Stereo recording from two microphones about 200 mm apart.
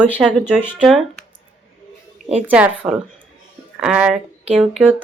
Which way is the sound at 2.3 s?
5° right (ahead or behind).